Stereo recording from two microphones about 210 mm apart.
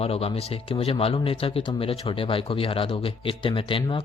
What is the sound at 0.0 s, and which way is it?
Speech, 30° left (ahead or behind).